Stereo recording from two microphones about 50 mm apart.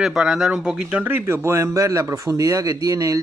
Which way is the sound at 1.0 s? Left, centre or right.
Right.